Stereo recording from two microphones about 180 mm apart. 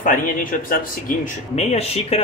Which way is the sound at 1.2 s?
35° left (ahead or behind).